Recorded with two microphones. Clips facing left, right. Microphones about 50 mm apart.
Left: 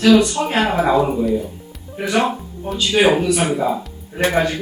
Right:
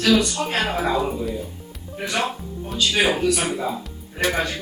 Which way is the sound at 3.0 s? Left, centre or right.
Left.